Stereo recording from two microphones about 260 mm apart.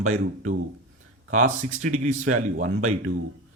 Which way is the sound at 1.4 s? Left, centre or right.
Right.